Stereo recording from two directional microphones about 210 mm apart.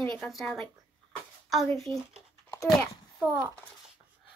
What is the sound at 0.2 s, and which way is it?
Speech, centre (ahead or behind).